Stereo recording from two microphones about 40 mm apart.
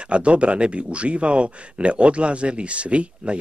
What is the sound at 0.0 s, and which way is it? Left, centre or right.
Speech, right.